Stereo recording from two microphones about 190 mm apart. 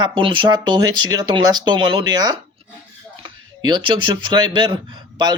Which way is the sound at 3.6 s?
25° right (ahead or behind).